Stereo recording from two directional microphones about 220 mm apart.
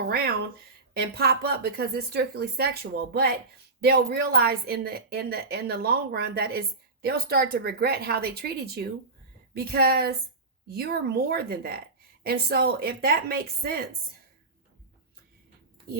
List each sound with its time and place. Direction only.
0.9 s a woman's voice: 45° right (ahead or behind)